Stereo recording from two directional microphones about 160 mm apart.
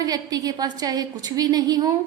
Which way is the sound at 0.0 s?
25° right (ahead or behind).